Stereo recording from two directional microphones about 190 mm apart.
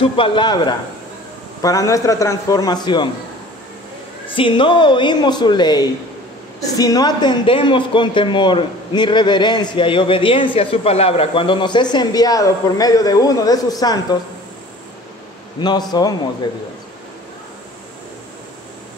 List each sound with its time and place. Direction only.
0.1 s a man's voice: 25° left (ahead or behind)
4.3 s speech: 25° left (ahead or behind)
15.6 s speech: 20° left (ahead or behind)